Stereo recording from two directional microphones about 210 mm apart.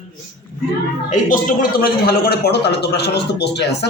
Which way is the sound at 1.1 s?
40° left (ahead or behind).